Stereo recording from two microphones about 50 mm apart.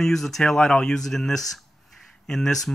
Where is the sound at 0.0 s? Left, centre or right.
Centre.